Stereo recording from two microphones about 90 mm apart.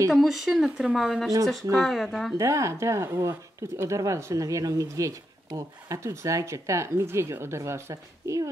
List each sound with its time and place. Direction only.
0.1 s speech: centre (ahead or behind)
2.3 s speech: 35° right (ahead or behind)